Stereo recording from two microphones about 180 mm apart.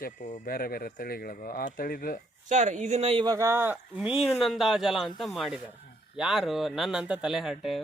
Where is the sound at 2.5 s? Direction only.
40° right (ahead or behind).